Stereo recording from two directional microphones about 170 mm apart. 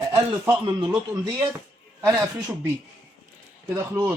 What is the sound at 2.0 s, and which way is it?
Speech, 15° right (ahead or behind).